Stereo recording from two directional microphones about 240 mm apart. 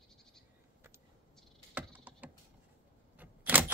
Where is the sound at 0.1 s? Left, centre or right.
Centre.